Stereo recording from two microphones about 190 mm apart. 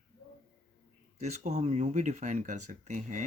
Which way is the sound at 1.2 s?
35° right (ahead or behind).